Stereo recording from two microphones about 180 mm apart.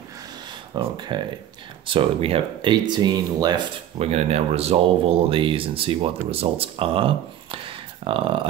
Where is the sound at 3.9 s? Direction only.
35° right (ahead or behind).